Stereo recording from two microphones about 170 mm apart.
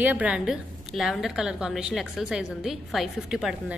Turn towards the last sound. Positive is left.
turn(degrees=0)  # may be behind; listen again after turning